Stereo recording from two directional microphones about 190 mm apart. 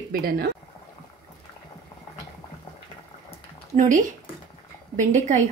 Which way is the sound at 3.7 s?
45° right (ahead or behind).